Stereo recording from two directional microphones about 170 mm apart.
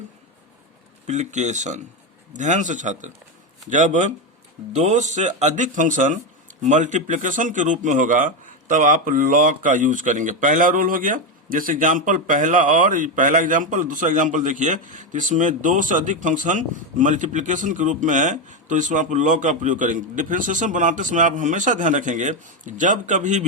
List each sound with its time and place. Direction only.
1.0 s speech: 40° right (ahead or behind)